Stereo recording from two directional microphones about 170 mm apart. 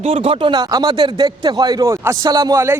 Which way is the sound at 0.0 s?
35° right (ahead or behind).